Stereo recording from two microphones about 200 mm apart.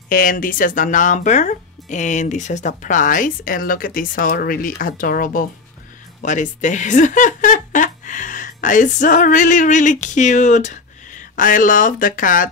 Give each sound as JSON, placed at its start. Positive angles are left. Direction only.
{"t": 0.1, "sound": "speech", "side_deg": 45}